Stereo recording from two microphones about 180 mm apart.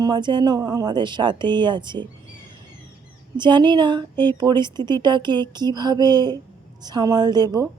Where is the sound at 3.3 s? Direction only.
25° right (ahead or behind).